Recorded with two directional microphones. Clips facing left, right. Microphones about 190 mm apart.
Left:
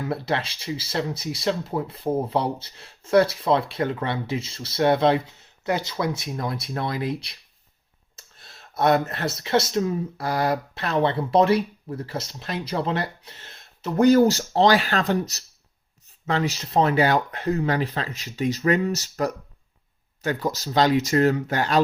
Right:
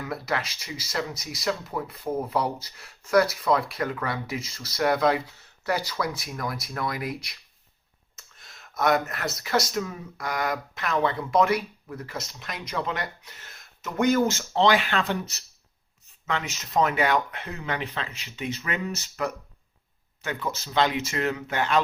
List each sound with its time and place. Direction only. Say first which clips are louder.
0.0 s speech: left 4 dB; 30° left (ahead or behind)